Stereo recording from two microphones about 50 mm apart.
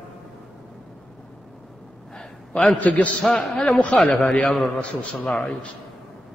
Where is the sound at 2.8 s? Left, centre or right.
Left.